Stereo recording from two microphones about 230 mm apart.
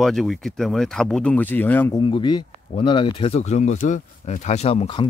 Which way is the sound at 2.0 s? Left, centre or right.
Left.